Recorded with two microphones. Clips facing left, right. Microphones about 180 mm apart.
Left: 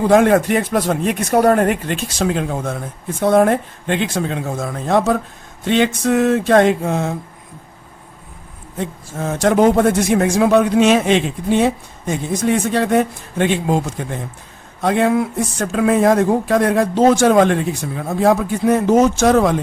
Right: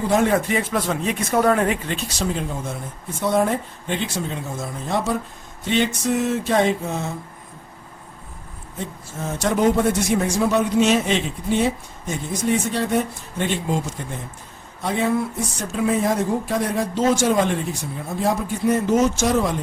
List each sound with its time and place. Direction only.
0.1 s speech: 70° left (ahead or behind)
0.4 s speech: 60° left (ahead or behind)
1.4 s speech: 45° left (ahead or behind); by 2.7 s 75° left (ahead or behind)
3.2 s speech: 60° left (ahead or behind)
5.6 s speech: 85° left; by 7.2 s 60° left (ahead or behind)
8.8 s speech: 55° left (ahead or behind)
10.2 s speech: 80° left; by 19.5 s 65° left (ahead or behind)